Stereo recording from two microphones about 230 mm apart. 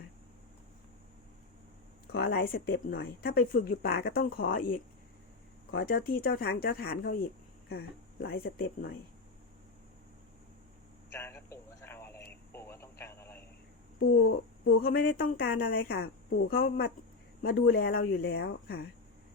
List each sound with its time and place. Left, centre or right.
2.1 s speech: left
11.1 s a sound: centre
12.5 s radio: centre
14.2 s a woman's voice: left
14.8 s speech: left